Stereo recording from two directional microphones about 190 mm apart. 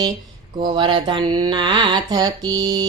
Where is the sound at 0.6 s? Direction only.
25° right (ahead or behind).